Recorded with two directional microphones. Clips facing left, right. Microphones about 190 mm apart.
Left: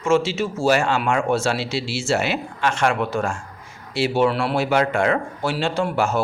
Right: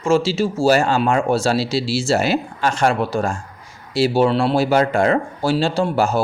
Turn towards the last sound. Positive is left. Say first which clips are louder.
# right 3 dB
turn(degrees=-35)  # may be behind; listen again after turning